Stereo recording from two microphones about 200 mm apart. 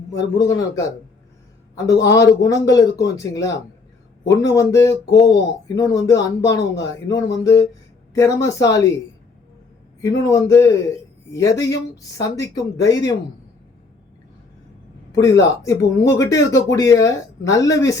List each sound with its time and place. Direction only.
0.3 s speech: 15° left (ahead or behind)
10.0 s speech: 15° left (ahead or behind)
15.1 s speech: 15° left (ahead or behind)